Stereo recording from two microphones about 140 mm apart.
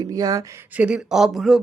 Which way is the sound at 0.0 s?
25° right (ahead or behind).